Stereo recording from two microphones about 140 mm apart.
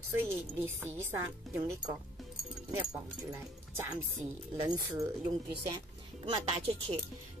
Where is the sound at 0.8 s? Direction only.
15° right (ahead or behind).